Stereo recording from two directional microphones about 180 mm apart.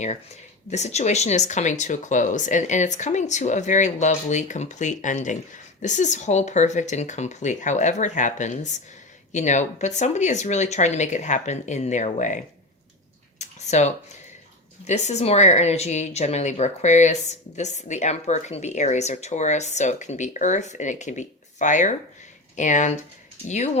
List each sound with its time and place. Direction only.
0.7 s a woman's voice: 40° left (ahead or behind)
13.4 s a sound: 40° left (ahead or behind)
14.8 s a woman's voice: 40° left (ahead or behind)